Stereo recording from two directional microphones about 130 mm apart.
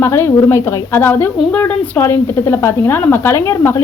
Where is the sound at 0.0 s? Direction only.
20° left (ahead or behind).